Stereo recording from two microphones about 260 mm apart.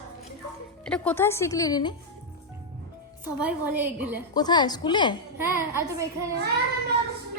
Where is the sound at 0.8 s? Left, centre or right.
Centre.